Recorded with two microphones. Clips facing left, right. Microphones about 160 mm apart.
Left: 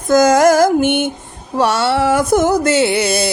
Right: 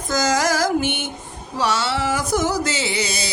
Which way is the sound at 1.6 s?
55° left (ahead or behind).